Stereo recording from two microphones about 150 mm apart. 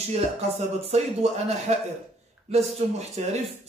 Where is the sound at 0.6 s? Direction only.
45° right (ahead or behind).